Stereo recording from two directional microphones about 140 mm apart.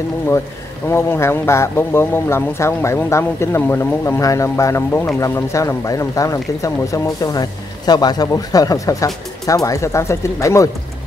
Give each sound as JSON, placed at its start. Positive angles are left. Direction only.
{"t": 0.8, "sound": "speech", "side_deg": 20}